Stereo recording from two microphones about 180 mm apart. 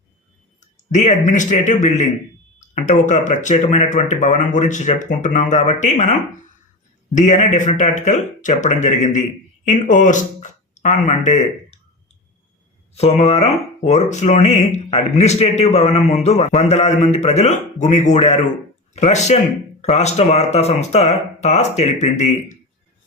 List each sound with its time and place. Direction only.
0.6 s speech: 40° left (ahead or behind)
2.6 s a sound: 40° left (ahead or behind)
3.1 s speech: 40° left (ahead or behind)
12.9 s speech: 35° left (ahead or behind)